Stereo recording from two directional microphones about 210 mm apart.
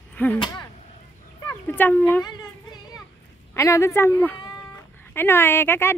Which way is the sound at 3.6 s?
15° left (ahead or behind).